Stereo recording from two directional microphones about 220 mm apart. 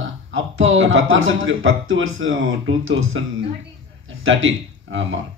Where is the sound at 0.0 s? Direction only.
60° right (ahead or behind).